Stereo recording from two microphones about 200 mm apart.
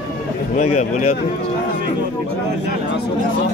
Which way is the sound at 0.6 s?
35° left (ahead or behind).